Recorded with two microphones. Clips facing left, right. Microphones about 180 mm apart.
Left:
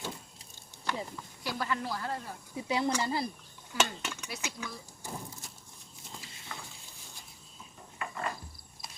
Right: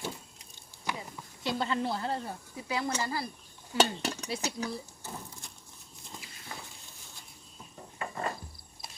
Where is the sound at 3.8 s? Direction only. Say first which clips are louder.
Right 5 dB; 35° right (ahead or behind).